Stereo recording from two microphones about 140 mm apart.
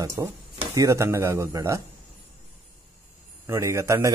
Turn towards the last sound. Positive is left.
turn(degrees=-20)  # may be behind; listen again after turning